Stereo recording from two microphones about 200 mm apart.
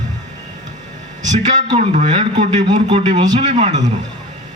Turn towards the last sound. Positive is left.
turn(degrees=-35)  # may be behind; listen again after turning